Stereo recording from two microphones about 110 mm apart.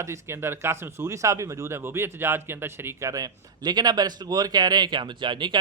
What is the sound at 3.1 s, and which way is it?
Speech, 35° right (ahead or behind).